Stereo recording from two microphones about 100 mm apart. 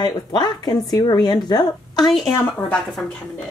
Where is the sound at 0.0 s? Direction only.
45° left (ahead or behind).